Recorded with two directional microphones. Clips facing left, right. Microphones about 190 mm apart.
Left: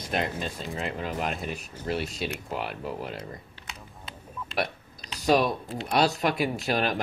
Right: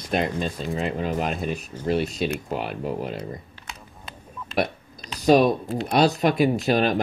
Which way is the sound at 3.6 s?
50° right (ahead or behind).